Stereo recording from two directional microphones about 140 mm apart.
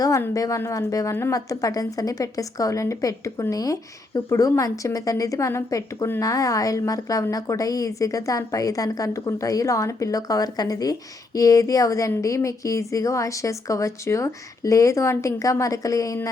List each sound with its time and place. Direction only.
0.0 s a woman's voice: 25° left (ahead or behind)